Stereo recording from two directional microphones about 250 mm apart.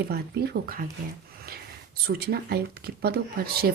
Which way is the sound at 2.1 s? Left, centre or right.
Right.